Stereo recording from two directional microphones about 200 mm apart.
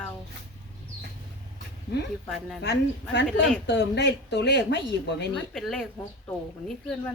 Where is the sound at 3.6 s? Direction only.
60° left (ahead or behind).